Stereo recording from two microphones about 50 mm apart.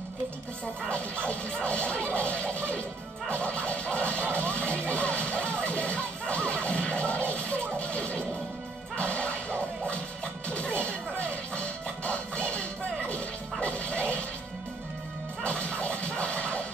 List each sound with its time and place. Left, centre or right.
0.8 s scratching: left
3.3 s music: left
8.9 s whip: left
10.5 s music: left
15.4 s music: left